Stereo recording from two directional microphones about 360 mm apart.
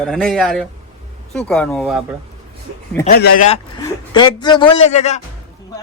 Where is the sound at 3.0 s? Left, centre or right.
Left.